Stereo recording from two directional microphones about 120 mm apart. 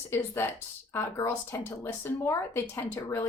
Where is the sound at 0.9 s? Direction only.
20° left (ahead or behind).